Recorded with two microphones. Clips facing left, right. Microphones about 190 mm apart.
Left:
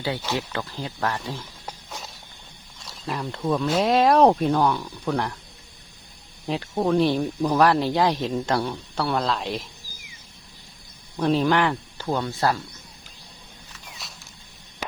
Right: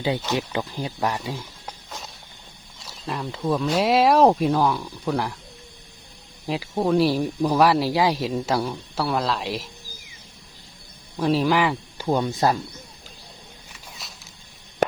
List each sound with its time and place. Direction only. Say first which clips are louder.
0.3 s speech: right 3 dB; 15° right (ahead or behind)
1.6 s a sound: even; centre (ahead or behind)
2.8 s speech: even; centre (ahead or behind)
6.4 s speech: even; 5° right (ahead or behind)
11.2 s speech: even; 5° right (ahead or behind)
12.0 s speech: right 3 dB; 15° right (ahead or behind)
14.0 s a sound: even; centre (ahead or behind)